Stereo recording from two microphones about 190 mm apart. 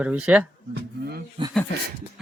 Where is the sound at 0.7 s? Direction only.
55° right (ahead or behind).